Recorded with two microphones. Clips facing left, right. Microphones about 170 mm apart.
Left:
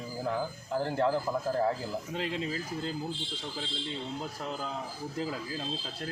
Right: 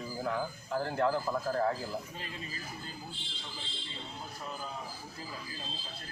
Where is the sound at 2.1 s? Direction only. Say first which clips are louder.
Left 10 dB; 90° left.